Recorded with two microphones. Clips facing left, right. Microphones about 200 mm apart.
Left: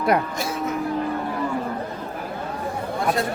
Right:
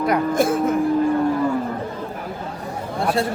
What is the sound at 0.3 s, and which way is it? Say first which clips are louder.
Speech: right 8 dB; 50° right (ahead or behind).